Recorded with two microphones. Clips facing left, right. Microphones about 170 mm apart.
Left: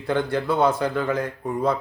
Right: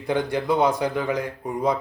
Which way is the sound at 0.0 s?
15° right (ahead or behind).